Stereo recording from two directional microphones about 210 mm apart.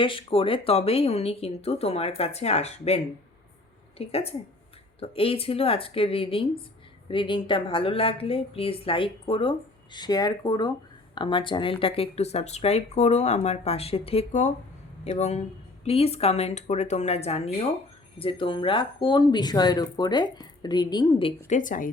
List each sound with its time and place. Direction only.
0.0 s a woman's voice: 25° left (ahead or behind); by 21.9 s 40° left (ahead or behind)